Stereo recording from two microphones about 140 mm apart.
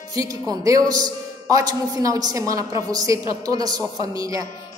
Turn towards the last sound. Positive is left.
turn(degrees=-25)  # may be behind; listen again after turning